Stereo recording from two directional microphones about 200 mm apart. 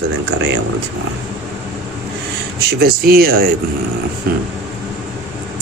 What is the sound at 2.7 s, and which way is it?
Speech, 50° right (ahead or behind).